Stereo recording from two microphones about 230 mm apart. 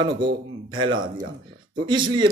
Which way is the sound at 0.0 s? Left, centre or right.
Right.